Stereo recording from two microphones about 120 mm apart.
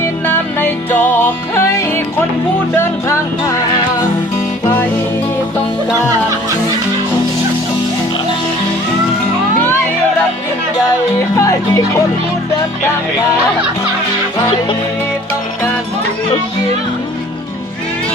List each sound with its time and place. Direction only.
0.0 s music: 15° left (ahead or behind)
2.7 s speech: 20° left (ahead or behind)
11.3 s speech: 25° left (ahead or behind)